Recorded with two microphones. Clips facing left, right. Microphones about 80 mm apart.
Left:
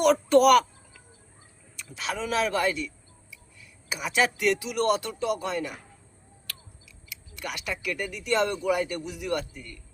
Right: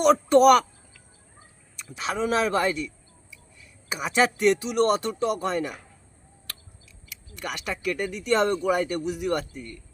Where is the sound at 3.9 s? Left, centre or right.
Right.